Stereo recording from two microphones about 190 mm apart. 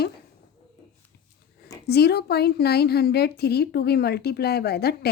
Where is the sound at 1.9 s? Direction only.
60° left (ahead or behind).